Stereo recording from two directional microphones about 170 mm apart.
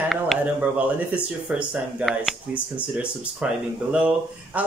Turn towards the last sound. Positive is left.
turn(degrees=-10)  # may be behind; listen again after turning